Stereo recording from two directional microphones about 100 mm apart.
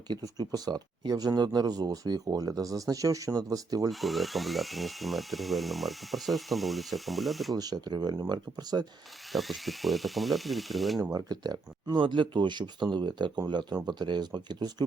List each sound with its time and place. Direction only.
0.1 s speech: 40° right (ahead or behind)
3.8 s speech: centre (ahead or behind)
7.5 s speech: 40° right (ahead or behind)
9.3 s speech: centre (ahead or behind)
11.1 s speech: 40° right (ahead or behind)